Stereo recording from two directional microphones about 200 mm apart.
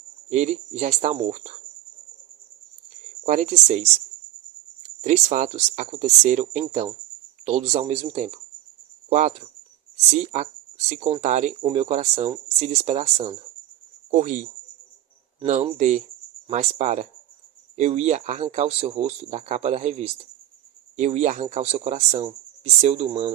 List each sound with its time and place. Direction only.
0.3 s speech: 35° right (ahead or behind)
3.2 s speech: 35° right (ahead or behind)
15.4 s speech: 35° right (ahead or behind)